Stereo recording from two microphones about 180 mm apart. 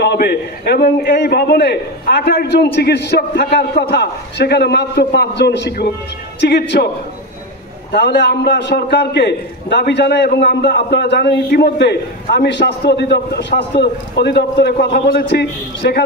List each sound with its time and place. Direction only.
0.0 s a man's voice: 60° left (ahead or behind)
7.9 s a man's voice: 70° left (ahead or behind)